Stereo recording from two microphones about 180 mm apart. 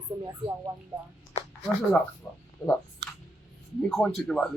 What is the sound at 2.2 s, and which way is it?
Speech, 15° left (ahead or behind).